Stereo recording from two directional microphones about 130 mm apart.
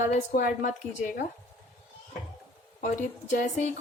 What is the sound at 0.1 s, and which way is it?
Speech, 85° left.